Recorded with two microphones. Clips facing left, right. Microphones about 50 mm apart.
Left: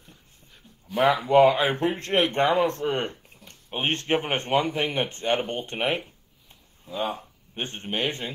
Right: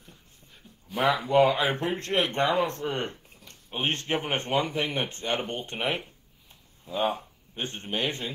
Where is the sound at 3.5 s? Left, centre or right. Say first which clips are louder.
Left 2 dB; left.